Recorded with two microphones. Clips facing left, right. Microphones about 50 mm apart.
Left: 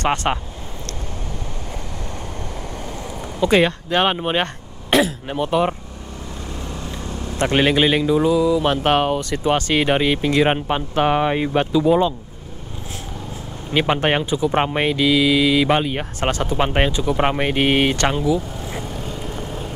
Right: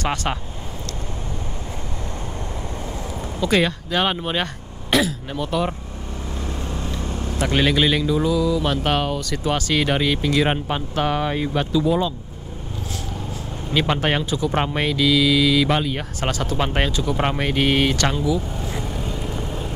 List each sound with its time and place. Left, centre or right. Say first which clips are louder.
0.0 s speech: left 4 dB; centre
3.3 s speech: left 4 dB; centre
7.4 s speech: left 3 dB; left
13.7 s speech: left 2 dB; left
14.3 s speech: left 3 dB; centre
16.2 s speech: left 4 dB; centre
16.5 s speech: left 3 dB; centre
18.9 s vehicle: right 1 dB; centre